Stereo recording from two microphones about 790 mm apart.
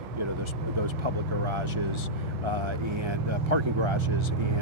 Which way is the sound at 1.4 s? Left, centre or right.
Right.